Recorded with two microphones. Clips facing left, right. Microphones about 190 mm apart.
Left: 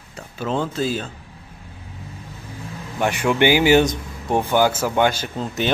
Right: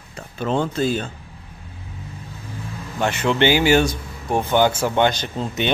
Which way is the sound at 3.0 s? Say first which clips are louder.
Left 1 dB; 15° left (ahead or behind).